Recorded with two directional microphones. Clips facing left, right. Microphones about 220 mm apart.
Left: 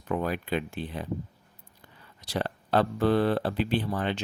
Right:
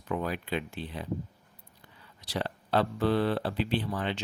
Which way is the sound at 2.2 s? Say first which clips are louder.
Left 3 dB; 50° left (ahead or behind).